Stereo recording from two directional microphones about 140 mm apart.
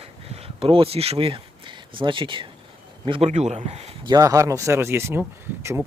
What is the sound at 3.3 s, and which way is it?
Speech, 55° right (ahead or behind).